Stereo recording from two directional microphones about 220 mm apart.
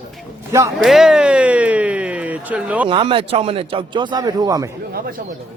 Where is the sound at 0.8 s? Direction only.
Centre (ahead or behind).